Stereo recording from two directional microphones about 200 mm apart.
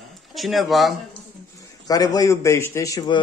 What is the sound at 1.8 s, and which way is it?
Speech, 20° left (ahead or behind).